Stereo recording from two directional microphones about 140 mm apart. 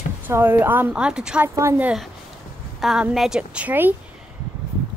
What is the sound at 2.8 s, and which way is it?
A woman's voice, 5° right (ahead or behind).